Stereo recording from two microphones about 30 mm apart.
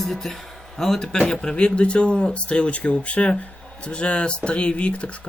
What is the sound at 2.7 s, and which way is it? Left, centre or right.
Speech, left.